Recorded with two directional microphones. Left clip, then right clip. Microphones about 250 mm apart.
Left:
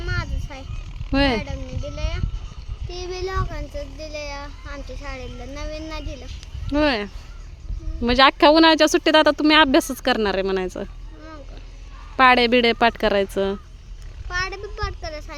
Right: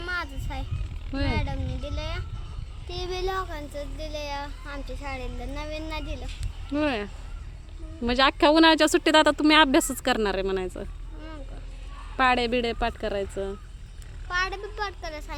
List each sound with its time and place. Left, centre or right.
0.0 s oink: centre
1.1 s speech: left
2.0 s child singing: centre
6.7 s speech: centre
12.1 s speech: left
14.3 s a sound: centre